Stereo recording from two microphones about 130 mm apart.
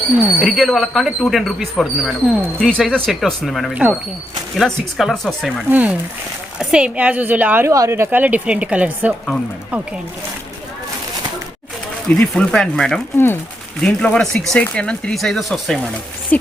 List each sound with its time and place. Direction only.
0.2 s speech: 5° right (ahead or behind)
5.6 s a woman's voice: 10° right (ahead or behind)
12.0 s speech: 10° left (ahead or behind)
13.1 s speech: 20° left (ahead or behind)
13.8 s speech: 5° left (ahead or behind)
16.3 s speech: 10° left (ahead or behind)